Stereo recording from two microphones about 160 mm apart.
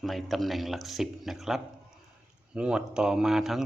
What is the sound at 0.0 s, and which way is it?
Speech, centre (ahead or behind).